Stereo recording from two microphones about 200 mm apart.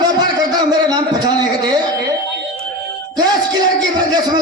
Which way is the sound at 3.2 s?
20° right (ahead or behind).